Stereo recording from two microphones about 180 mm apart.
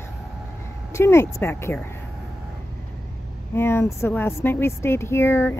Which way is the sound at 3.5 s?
15° left (ahead or behind).